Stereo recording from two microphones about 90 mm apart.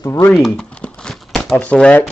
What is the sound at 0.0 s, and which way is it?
Speech, 35° left (ahead or behind).